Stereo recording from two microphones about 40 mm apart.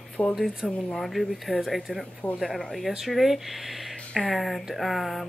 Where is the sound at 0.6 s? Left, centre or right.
Centre.